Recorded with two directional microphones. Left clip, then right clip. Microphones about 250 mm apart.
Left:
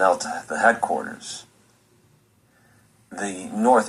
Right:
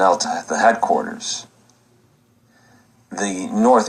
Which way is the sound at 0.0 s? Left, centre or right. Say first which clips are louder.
Right 4 dB; right.